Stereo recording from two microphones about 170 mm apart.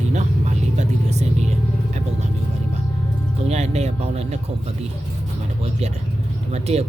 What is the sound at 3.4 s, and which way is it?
Speech, 40° right (ahead or behind).